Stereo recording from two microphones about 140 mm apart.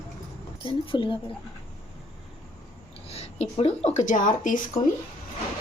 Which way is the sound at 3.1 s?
45° left (ahead or behind).